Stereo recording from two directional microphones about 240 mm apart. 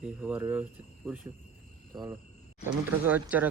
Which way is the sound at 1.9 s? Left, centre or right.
Centre.